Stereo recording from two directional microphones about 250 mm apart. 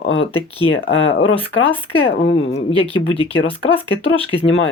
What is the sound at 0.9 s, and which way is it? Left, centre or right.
Speech, left.